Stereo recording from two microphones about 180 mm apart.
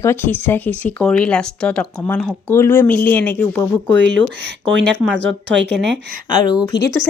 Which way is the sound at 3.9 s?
80° right.